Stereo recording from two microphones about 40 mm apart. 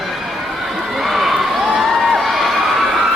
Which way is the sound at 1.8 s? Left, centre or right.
Centre.